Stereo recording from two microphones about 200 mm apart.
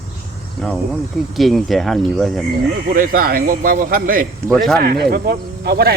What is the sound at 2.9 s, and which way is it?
Speech, 45° right (ahead or behind).